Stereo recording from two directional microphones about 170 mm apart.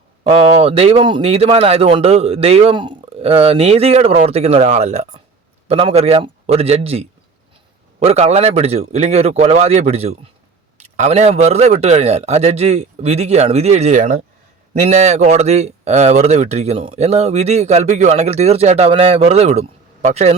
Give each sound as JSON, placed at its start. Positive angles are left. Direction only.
{"t": 0.3, "sound": "speech", "side_deg": -35}